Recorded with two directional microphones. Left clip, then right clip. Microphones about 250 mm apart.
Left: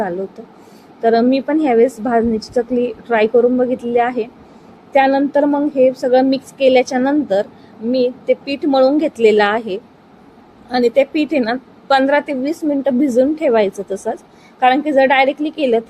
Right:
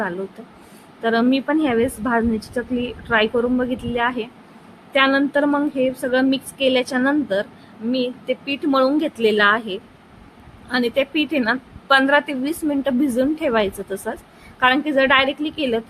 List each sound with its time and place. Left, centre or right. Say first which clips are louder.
1.0 s a woman's voice: left 5 dB; centre